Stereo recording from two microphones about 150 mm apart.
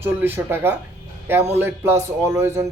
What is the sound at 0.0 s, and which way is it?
Speech, 15° right (ahead or behind).